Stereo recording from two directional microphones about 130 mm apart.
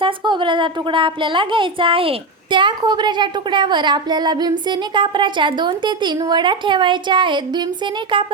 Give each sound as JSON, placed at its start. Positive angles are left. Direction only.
{"t": 0.0, "sound": "a woman's voice", "side_deg": -40}